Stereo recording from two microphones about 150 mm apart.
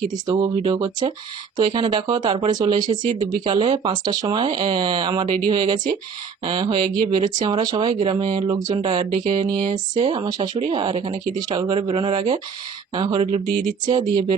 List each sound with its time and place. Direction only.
0.1 s speech: 30° right (ahead or behind)